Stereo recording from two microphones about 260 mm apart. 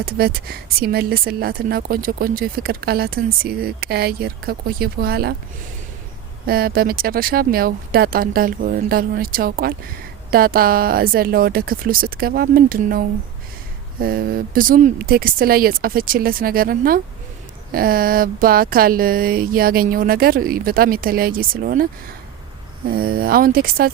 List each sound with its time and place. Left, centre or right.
0.0 s speech: right
6.4 s speech: right
22.9 s speech: right